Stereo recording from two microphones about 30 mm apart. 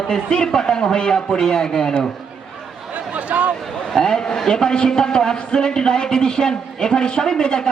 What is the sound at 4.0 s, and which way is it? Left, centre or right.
A man's voice, left.